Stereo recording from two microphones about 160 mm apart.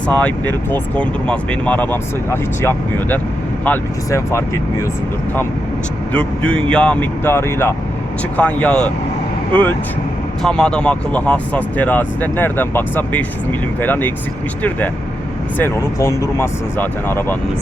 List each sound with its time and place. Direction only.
0.1 s speech: 10° left (ahead or behind)
6.1 s speech: 5° left (ahead or behind)
15.5 s speech: 15° left (ahead or behind)